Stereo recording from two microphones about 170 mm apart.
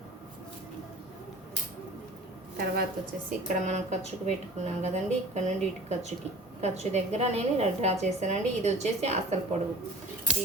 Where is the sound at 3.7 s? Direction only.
45° right (ahead or behind).